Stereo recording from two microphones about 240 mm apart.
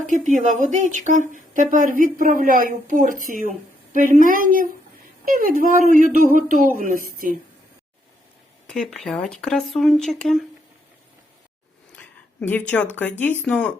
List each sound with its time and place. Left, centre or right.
0.0 s a woman's voice: right
8.6 s speech: centre
12.4 s speech: centre